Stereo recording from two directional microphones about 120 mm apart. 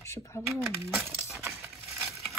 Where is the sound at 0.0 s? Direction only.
25° left (ahead or behind).